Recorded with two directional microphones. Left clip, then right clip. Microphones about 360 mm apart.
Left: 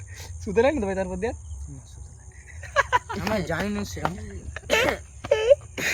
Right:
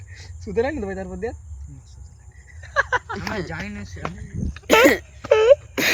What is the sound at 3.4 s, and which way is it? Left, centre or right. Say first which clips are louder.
Speech: left 4 dB; centre.